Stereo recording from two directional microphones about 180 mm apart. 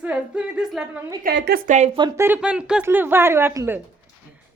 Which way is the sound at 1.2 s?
65° right (ahead or behind).